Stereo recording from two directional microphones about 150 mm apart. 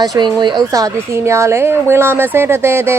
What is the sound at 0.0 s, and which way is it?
A woman's voice, 25° right (ahead or behind).